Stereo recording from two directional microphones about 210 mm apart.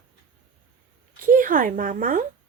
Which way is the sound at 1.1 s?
40° right (ahead or behind).